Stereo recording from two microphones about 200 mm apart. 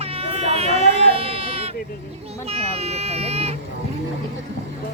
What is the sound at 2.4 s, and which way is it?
Vehicle, 30° right (ahead or behind).